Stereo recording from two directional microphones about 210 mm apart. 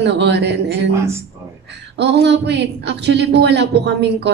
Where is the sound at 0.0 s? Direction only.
55° right (ahead or behind).